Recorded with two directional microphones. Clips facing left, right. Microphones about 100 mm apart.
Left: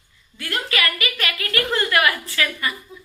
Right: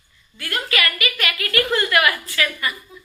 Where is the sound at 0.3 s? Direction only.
25° left (ahead or behind).